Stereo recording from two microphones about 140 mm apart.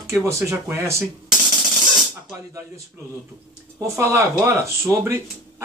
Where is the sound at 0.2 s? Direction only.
20° right (ahead or behind).